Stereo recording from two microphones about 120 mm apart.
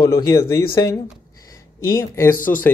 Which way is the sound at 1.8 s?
25° left (ahead or behind).